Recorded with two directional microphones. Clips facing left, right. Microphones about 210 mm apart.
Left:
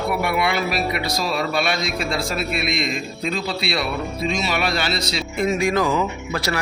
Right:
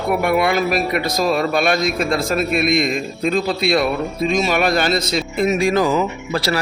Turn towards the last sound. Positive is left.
turn(degrees=-30)  # may be behind; listen again after turning